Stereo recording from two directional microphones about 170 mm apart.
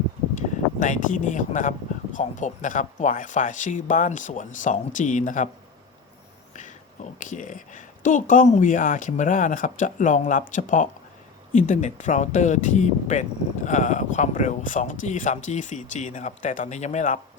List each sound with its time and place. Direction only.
0.3 s speech: 50° left (ahead or behind)
6.5 s speech: 45° left (ahead or behind)